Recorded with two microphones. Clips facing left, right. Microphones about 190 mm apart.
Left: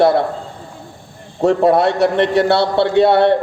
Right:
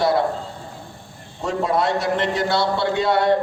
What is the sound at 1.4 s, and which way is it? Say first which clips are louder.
A man's voice: left 9 dB; 60° left (ahead or behind).